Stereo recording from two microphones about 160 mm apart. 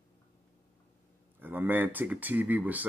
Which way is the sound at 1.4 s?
10° right (ahead or behind).